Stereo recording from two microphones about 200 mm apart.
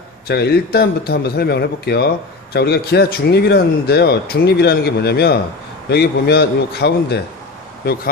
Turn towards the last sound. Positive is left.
turn(degrees=50)  # may be behind; listen again after turning